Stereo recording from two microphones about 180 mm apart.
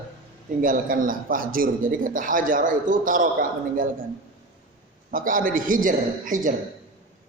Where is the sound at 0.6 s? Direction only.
50° right (ahead or behind).